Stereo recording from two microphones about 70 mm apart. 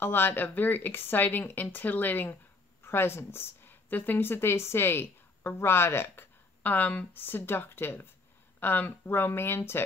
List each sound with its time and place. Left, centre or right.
0.0 s a woman's voice: left